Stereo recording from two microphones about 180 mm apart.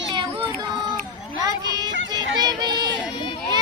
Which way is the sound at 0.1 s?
25° right (ahead or behind).